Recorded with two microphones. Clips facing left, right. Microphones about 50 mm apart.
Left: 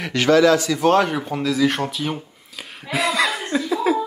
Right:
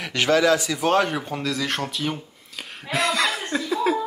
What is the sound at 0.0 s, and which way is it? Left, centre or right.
Speech, centre.